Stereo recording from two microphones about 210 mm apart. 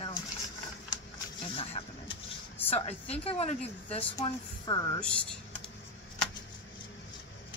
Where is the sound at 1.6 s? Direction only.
25° left (ahead or behind).